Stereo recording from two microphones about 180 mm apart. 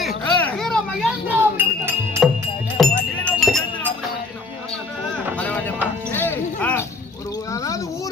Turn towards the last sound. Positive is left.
turn(degrees=10)  # may be behind; listen again after turning